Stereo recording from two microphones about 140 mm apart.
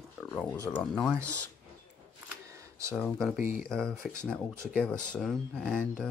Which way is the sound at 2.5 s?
20° right (ahead or behind).